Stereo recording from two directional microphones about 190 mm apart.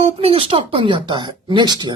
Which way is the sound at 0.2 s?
30° right (ahead or behind).